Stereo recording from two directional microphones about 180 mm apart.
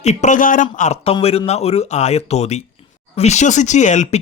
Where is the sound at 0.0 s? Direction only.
40° left (ahead or behind).